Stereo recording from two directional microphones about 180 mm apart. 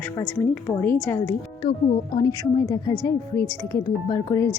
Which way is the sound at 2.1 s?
20° left (ahead or behind).